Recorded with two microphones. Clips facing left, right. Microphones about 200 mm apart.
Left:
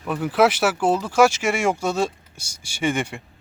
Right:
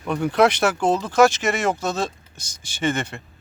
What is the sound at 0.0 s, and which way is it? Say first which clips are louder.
Speech: right 1 dB; 5° left (ahead or behind).